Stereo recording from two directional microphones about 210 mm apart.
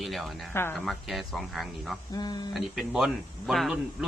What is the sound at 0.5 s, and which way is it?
Speech, 10° left (ahead or behind).